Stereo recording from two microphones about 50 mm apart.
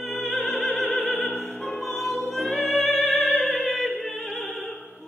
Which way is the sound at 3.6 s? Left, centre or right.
Centre.